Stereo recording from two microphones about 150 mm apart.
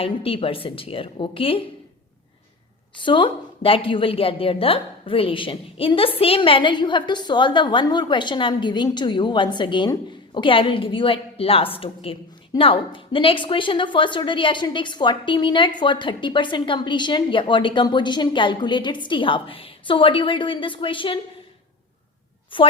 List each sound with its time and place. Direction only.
0.0 s a woman's voice: 40° left (ahead or behind)
3.0 s a woman's voice: 35° left (ahead or behind)
22.5 s a woman's voice: 35° left (ahead or behind)